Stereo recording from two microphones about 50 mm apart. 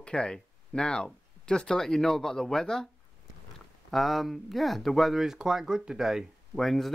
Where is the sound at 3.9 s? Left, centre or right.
Centre.